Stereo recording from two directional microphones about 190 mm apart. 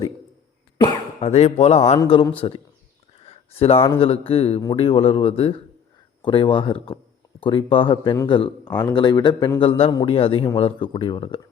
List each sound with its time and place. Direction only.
1.2 s speech: 35° left (ahead or behind)